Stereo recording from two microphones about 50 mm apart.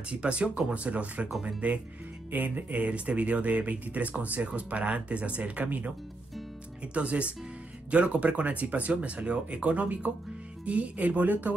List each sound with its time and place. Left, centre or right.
0.1 s speech: right